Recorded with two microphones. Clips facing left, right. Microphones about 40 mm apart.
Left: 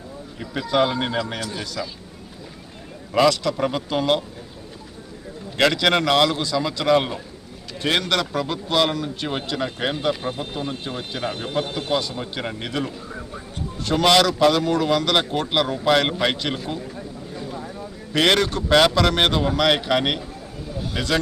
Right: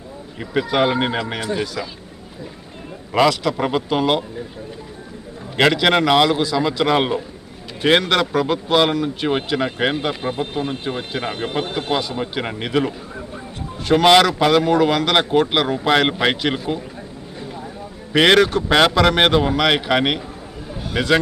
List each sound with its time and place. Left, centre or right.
0.3 s a man's voice: right
1.6 s a man's voice: centre
3.2 s a man's voice: centre
5.5 s a man's voice: centre; by 11.7 s right
11.9 s a man's voice: centre
14.0 s a man's voice: centre
18.1 s a man's voice: right